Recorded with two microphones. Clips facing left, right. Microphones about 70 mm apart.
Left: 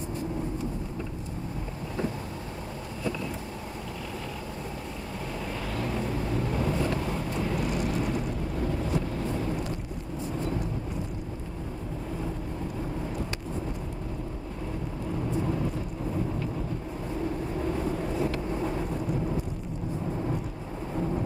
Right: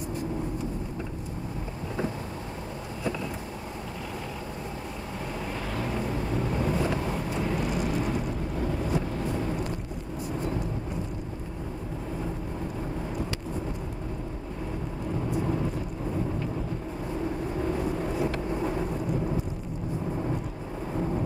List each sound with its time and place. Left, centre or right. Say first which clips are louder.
5.8 s vehicle: even; centre
17.7 s vehicle: right 1 dB; centre